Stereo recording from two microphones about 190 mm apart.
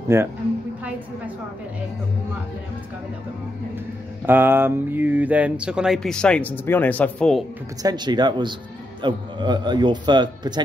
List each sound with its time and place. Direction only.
0.1 s a woman's voice: 15° right (ahead or behind)
4.3 s speech: 10° right (ahead or behind)
7.8 s a man's voice: 20° right (ahead or behind)